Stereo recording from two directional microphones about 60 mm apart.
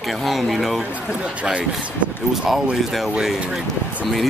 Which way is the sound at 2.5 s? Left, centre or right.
Centre.